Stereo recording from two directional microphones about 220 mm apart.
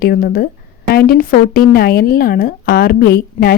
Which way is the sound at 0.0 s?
45° left (ahead or behind).